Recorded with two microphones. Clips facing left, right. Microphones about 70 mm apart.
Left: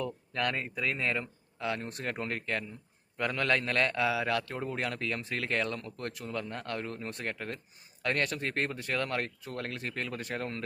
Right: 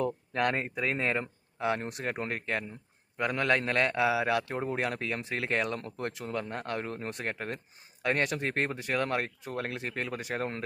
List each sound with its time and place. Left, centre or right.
0.0 s speech: right